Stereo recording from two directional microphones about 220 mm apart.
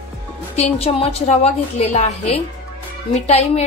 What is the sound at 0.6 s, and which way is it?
A woman's voice, 30° left (ahead or behind).